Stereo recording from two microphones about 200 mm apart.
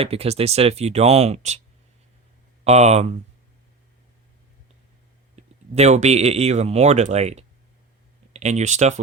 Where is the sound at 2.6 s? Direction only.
35° right (ahead or behind).